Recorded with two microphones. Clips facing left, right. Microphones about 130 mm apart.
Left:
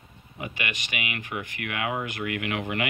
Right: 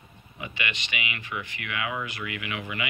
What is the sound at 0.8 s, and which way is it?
Speech, 50° left (ahead or behind).